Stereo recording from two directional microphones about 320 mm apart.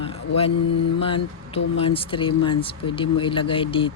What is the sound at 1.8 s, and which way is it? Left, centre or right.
Speech, centre.